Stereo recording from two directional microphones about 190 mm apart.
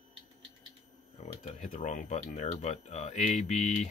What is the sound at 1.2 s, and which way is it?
Speech, 35° left (ahead or behind).